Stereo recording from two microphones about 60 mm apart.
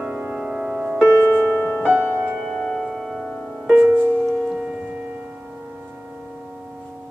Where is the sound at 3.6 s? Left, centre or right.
Right.